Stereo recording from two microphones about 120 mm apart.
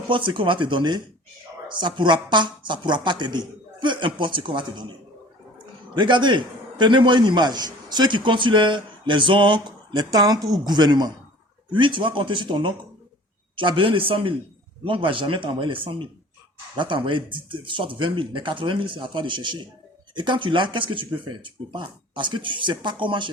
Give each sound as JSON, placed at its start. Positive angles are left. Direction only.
{"t": 0.1, "sound": "a man's voice", "side_deg": -45}